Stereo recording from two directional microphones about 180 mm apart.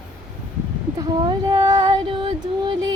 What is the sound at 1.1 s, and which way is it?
Music, 20° right (ahead or behind).